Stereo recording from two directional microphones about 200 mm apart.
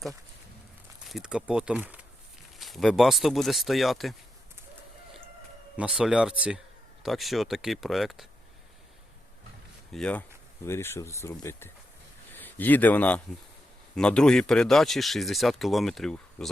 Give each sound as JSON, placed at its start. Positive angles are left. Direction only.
{"t": 1.0, "sound": "speech", "side_deg": 0}
{"t": 5.7, "sound": "speech", "side_deg": -5}
{"t": 9.9, "sound": "speech", "side_deg": 5}